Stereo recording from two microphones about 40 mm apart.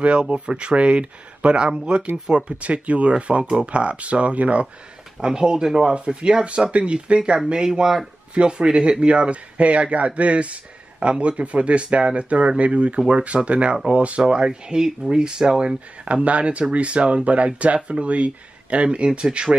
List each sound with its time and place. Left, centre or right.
0.2 s speech: right
5.2 s speech: centre; by 14.2 s right
14.2 s speech: right